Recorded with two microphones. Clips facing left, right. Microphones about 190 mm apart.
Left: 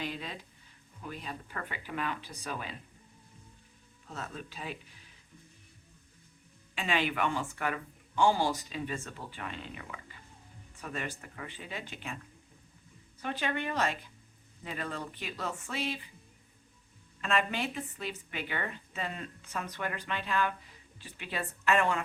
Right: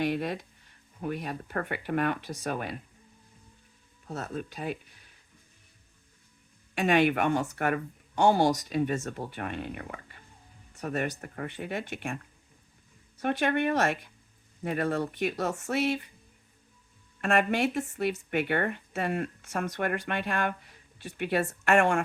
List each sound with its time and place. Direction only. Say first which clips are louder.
0.0 s speech: right 10 dB; 65° right (ahead or behind)
4.0 s speech: right 7 dB; 40° right (ahead or behind)
4.5 s speech: right 7 dB; 55° right (ahead or behind)
6.7 s speech: right 8 dB; 60° right (ahead or behind)
8.9 s speech: right 8 dB; 45° right (ahead or behind)
9.3 s speech: right 7 dB; 55° right (ahead or behind)
13.2 s speech: right 8 dB; 60° right (ahead or behind)
17.2 s speech: right 6 dB; 60° right (ahead or behind)
17.7 s speech: right 9 dB; 45° right (ahead or behind)